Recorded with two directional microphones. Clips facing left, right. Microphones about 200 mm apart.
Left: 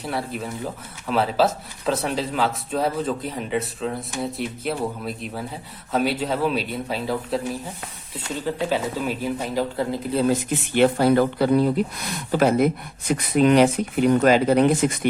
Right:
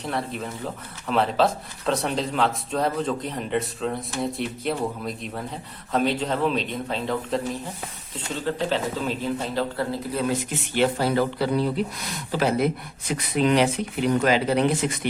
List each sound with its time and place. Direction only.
0.0 s a man's voice: 5° left (ahead or behind)
10.8 s speech: 55° left (ahead or behind)